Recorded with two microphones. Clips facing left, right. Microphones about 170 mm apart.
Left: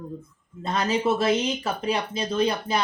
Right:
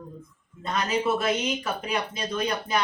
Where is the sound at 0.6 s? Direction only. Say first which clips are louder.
Left 2 dB; 30° left (ahead or behind).